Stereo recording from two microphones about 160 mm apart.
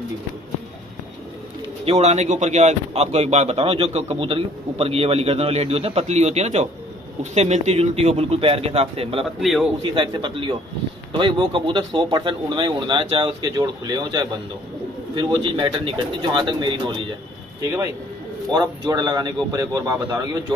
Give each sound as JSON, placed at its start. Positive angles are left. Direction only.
{"t": 1.9, "sound": "speech", "side_deg": -45}
{"t": 9.2, "sound": "a man's voice", "side_deg": 0}
{"t": 9.8, "sound": "speech", "side_deg": -30}
{"t": 18.5, "sound": "speech", "side_deg": -25}